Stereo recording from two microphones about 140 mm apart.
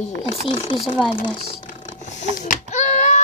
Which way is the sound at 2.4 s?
60° left (ahead or behind).